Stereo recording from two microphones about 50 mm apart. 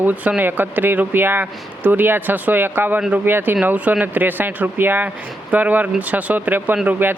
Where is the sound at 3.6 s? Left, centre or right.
Right.